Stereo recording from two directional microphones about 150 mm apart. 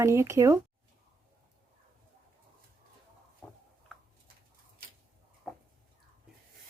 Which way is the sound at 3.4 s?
5° left (ahead or behind).